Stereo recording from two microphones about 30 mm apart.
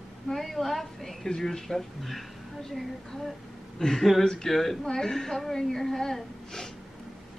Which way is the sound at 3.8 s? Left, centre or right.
Centre.